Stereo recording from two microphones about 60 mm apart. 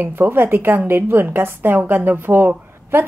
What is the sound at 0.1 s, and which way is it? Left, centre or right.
A woman's voice, right.